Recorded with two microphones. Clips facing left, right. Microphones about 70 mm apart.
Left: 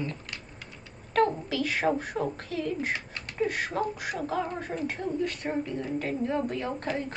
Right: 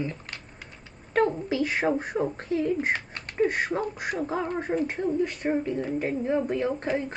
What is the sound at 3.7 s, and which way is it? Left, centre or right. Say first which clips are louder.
Speech: right 1 dB; right.